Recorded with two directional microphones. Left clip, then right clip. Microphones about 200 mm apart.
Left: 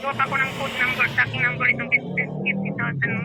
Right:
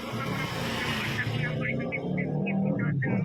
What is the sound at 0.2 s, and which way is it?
Speech, 55° left (ahead or behind).